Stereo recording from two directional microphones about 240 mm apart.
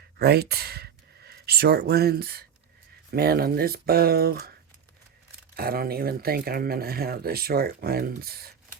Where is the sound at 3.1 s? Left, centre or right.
Right.